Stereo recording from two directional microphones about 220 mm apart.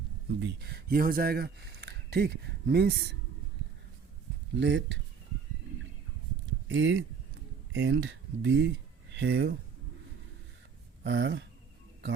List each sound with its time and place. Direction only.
0.3 s speech: 50° right (ahead or behind)
4.5 s speech: 55° right (ahead or behind)
6.7 s speech: 60° right (ahead or behind)
11.0 s speech: 55° right (ahead or behind)